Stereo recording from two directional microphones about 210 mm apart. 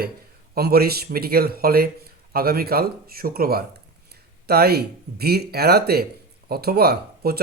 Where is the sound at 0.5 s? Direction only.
45° right (ahead or behind).